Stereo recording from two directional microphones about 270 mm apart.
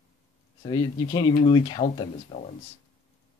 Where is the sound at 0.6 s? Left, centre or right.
Centre.